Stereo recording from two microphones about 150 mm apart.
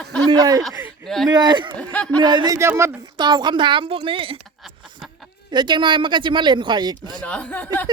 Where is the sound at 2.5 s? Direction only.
20° right (ahead or behind).